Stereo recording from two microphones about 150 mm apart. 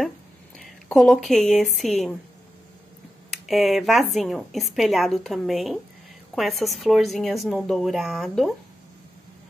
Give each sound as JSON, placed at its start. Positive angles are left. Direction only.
{"t": 0.6, "sound": "speech", "side_deg": 5}
{"t": 3.3, "sound": "speech", "side_deg": 0}